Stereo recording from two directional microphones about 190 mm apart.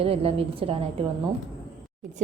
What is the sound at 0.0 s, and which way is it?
A woman's voice, 30° right (ahead or behind).